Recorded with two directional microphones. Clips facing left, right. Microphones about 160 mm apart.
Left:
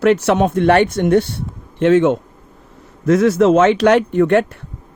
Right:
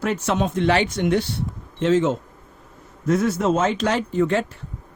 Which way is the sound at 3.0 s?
80° left.